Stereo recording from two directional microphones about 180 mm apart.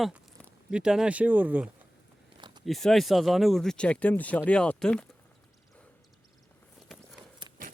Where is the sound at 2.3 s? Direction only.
25° right (ahead or behind).